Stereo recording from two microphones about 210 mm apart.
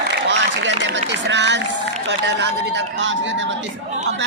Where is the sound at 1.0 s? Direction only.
55° right (ahead or behind).